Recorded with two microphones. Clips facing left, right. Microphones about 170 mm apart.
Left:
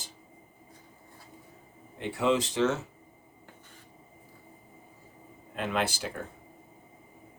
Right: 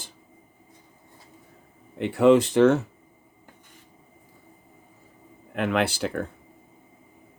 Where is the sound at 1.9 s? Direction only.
60° right (ahead or behind).